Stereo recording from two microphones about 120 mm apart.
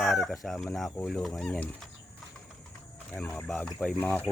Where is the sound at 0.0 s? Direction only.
Centre (ahead or behind).